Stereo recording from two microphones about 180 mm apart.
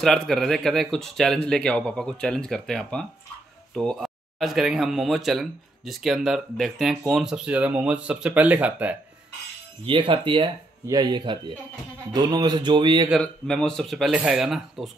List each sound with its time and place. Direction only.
0.0 s speech: centre (ahead or behind)
9.8 s speech: 30° right (ahead or behind)
13.2 s speech: 5° left (ahead or behind)